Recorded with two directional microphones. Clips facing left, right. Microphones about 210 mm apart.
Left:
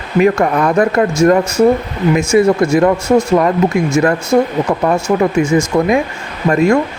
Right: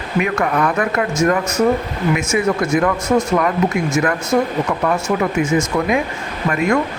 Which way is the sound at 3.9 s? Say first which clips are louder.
Left 5 dB; 30° left (ahead or behind).